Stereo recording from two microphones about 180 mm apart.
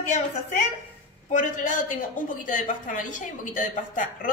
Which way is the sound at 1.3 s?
45° left (ahead or behind).